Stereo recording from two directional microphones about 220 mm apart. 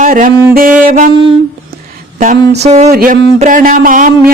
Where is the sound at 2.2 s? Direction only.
35° right (ahead or behind).